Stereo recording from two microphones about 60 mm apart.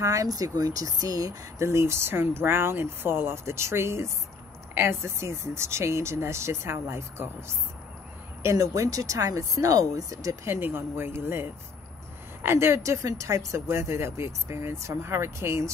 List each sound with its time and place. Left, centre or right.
0.0 s speech: right
1.6 s speech: right
8.4 s speech: right
10.4 s a woman's voice: right
12.4 s speech: right